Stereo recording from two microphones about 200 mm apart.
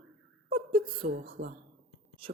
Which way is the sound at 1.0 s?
35° right (ahead or behind).